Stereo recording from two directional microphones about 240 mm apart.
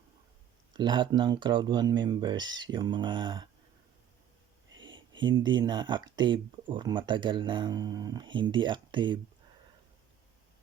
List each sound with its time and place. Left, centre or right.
0.7 s speech: centre
4.8 s speech: centre